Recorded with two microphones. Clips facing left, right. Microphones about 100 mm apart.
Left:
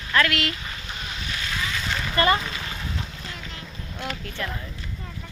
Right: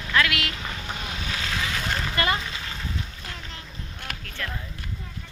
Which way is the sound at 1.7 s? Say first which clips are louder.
Right 1 dB; 45° right (ahead or behind).